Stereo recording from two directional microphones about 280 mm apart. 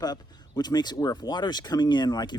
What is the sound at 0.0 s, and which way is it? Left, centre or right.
Speech, centre.